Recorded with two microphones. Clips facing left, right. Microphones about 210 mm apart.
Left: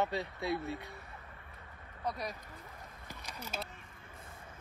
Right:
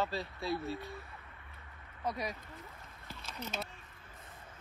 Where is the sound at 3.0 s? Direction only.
15° left (ahead or behind).